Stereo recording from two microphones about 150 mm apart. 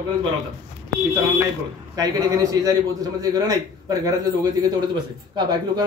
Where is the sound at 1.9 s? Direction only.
25° right (ahead or behind).